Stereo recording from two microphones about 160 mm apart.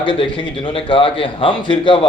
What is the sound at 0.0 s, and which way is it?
A man's voice, 30° left (ahead or behind).